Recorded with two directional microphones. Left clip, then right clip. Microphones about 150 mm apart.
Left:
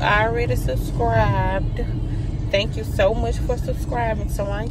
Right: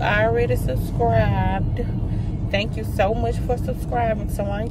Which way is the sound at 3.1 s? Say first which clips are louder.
Right 1 dB; 15° right (ahead or behind).